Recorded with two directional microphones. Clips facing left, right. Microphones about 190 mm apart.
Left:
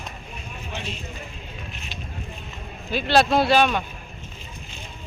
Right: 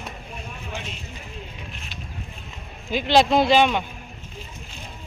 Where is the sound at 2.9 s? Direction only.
15° right (ahead or behind).